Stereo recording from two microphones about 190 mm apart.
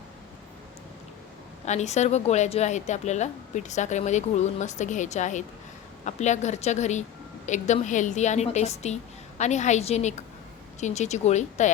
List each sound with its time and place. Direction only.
1.6 s a woman's voice: 35° left (ahead or behind)